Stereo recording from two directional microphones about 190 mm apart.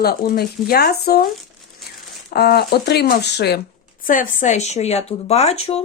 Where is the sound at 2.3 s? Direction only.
55° left (ahead or behind).